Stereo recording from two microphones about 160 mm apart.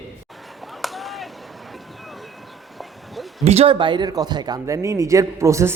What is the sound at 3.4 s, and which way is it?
Speech, 40° right (ahead or behind).